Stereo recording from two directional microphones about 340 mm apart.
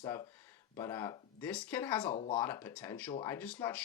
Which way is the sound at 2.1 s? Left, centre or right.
Centre.